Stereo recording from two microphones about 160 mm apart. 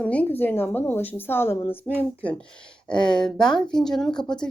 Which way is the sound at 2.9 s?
5° left (ahead or behind).